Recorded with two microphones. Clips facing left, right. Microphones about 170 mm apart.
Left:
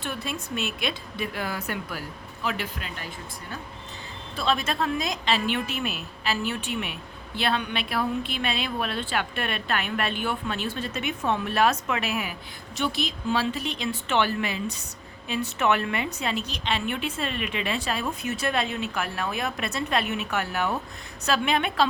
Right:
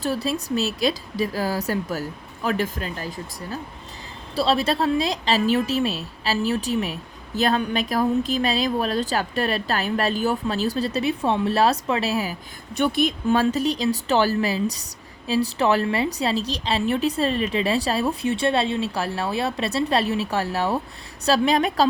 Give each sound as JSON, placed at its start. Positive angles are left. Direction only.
{"t": 0.0, "sound": "a woman's voice", "side_deg": -35}
{"t": 12.7, "sound": "a woman's voice", "side_deg": -55}